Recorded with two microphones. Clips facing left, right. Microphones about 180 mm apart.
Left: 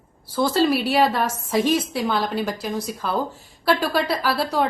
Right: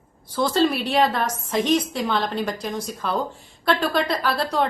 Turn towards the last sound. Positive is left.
turn(degrees=5)  # may be behind; listen again after turning